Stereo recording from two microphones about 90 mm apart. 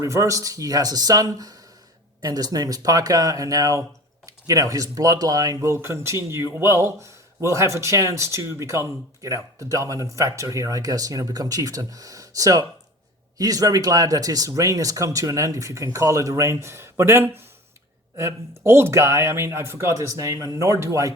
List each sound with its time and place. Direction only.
0.0 s speech: 35° right (ahead or behind)